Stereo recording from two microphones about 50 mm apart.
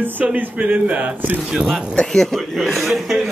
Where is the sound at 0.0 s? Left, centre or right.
Right.